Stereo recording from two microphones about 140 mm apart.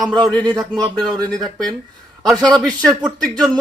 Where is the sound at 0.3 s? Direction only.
10° left (ahead or behind).